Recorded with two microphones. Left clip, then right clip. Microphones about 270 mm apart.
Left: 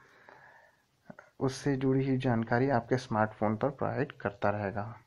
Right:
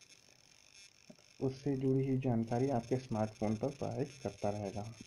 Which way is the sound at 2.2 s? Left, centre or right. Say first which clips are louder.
Left 6 dB; centre.